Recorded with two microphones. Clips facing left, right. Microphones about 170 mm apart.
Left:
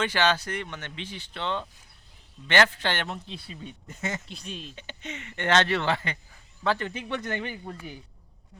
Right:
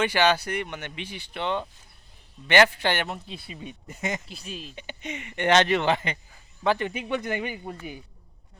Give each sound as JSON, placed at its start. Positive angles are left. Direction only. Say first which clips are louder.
{"t": 0.0, "sound": "speech", "louder": "right 3 dB", "side_deg": -10}
{"t": 4.3, "sound": "speech", "louder": "right 1 dB", "side_deg": -5}